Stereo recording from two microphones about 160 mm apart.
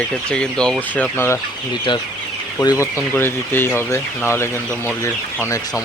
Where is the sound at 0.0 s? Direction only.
5° left (ahead or behind).